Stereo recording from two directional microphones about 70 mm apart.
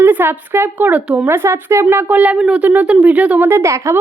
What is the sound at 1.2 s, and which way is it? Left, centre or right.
Speech, right.